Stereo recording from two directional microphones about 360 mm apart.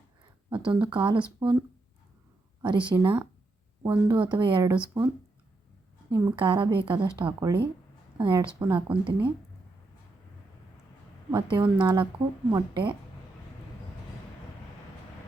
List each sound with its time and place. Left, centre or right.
0.5 s speech: centre
2.6 s speech: centre
6.1 s speech: centre
11.3 s speech: centre